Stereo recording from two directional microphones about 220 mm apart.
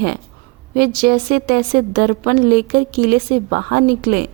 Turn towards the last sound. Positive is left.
turn(degrees=-40)  # may be behind; listen again after turning